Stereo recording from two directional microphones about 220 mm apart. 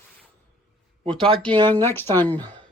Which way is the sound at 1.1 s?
25° right (ahead or behind).